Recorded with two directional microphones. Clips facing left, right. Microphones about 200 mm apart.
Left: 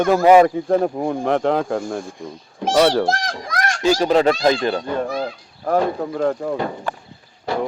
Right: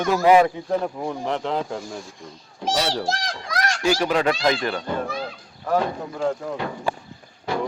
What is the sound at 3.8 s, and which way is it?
Speech, 25° left (ahead or behind).